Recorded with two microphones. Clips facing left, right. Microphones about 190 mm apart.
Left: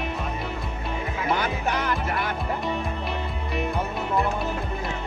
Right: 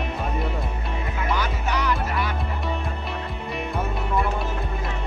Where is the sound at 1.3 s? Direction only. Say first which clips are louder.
Left 1 dB; 55° left (ahead or behind).